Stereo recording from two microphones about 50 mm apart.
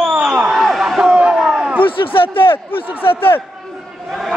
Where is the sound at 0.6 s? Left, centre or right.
Centre.